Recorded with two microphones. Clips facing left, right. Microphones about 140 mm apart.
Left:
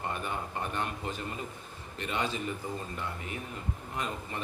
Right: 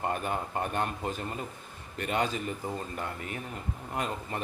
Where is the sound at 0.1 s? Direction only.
45° right (ahead or behind).